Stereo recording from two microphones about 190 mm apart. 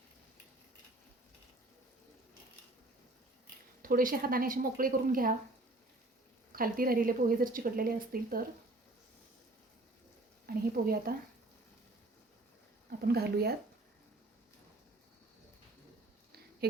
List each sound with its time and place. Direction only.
3.8 s speech: 50° right (ahead or behind)
6.5 s speech: 50° right (ahead or behind)
10.4 s speech: 50° right (ahead or behind)
13.0 s speech: 55° right (ahead or behind)